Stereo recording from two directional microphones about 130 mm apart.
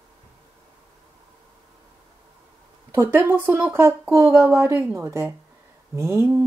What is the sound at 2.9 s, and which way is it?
Speech, 15° right (ahead or behind).